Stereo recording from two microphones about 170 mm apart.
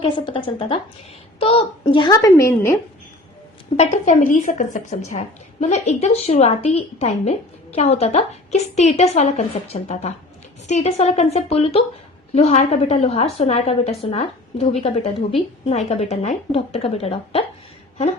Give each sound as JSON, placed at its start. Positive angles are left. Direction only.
{"t": 0.0, "sound": "a woman's voice", "side_deg": 30}
{"t": 3.8, "sound": "a woman's voice", "side_deg": 45}